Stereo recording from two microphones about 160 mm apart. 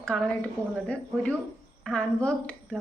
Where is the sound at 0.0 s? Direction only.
5° left (ahead or behind).